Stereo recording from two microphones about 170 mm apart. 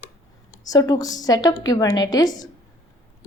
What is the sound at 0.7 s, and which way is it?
A woman's voice, 20° left (ahead or behind).